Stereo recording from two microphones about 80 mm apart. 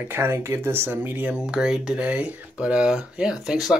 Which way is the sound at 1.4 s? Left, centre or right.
Centre.